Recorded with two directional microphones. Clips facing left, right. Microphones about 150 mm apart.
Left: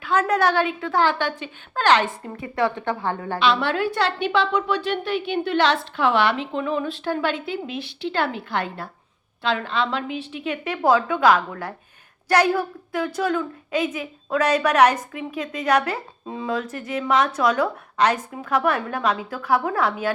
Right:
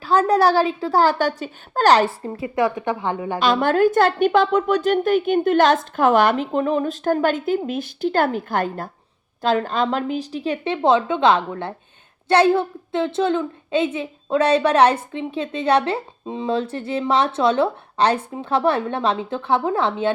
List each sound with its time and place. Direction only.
0.0 s a woman's voice: 35° right (ahead or behind)
2.6 s a woman's voice: 20° right (ahead or behind)
3.3 s a woman's voice: 45° right (ahead or behind); by 20.1 s 25° right (ahead or behind)